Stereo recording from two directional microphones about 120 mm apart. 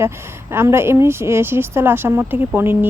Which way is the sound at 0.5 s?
20° right (ahead or behind).